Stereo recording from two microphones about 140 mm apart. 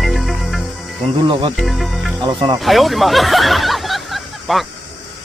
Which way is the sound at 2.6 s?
Centre (ahead or behind).